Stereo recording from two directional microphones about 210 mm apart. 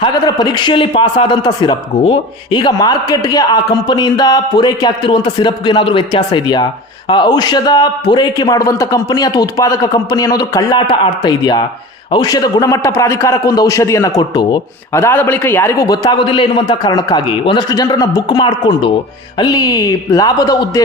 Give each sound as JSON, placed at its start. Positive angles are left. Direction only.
{"t": 0.0, "sound": "a man's voice", "side_deg": 20}